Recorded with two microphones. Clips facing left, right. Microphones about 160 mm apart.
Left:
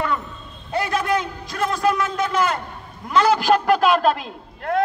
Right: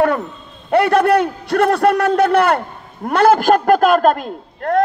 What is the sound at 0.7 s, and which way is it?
A man's voice, 65° right (ahead or behind).